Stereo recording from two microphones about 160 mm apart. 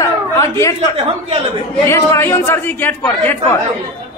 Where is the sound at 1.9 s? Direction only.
15° left (ahead or behind).